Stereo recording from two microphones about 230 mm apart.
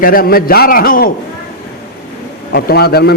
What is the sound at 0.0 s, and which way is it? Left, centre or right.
A man's voice, left.